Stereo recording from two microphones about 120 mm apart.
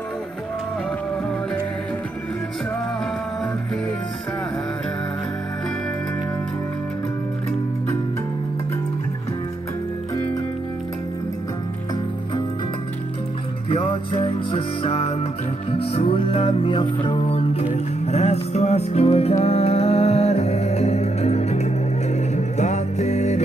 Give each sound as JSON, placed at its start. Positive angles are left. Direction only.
{"t": 13.7, "sound": "music", "side_deg": 50}